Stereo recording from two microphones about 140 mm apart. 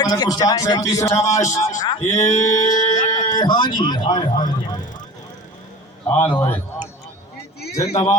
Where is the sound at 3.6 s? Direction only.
35° left (ahead or behind).